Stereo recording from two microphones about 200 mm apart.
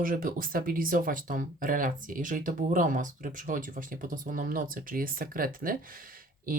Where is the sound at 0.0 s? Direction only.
45° right (ahead or behind).